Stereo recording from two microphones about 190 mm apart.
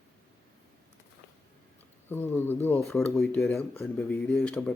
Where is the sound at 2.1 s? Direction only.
10° left (ahead or behind).